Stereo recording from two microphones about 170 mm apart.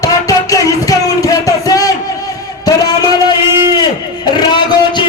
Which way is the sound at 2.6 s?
20° left (ahead or behind).